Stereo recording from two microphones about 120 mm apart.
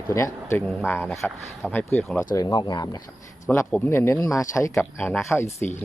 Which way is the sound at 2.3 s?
35° left (ahead or behind).